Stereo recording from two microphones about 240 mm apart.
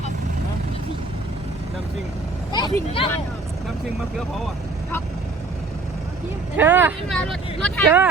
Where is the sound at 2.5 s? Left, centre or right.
Centre.